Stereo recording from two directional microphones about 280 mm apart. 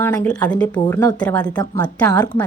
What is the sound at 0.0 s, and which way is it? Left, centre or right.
A woman's voice, centre.